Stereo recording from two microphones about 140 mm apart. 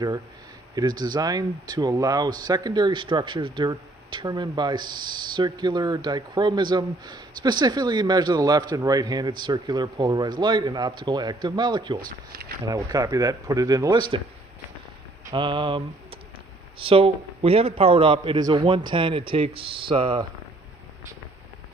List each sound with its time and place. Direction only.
0.7 s speech: 30° right (ahead or behind)
15.3 s speech: 35° right (ahead or behind)